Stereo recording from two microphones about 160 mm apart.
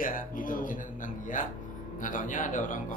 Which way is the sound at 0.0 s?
60° left (ahead or behind).